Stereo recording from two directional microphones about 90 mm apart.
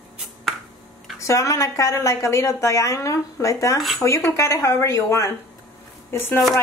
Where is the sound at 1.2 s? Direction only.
35° left (ahead or behind).